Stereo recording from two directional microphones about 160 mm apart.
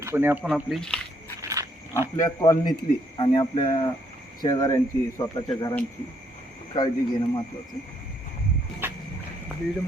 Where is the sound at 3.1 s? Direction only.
30° left (ahead or behind).